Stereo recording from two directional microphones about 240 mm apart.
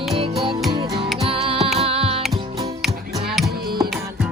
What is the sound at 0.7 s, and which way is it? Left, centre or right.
Music, centre.